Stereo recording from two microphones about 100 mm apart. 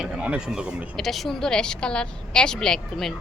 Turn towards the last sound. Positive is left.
turn(degrees=5)  # may be behind; listen again after turning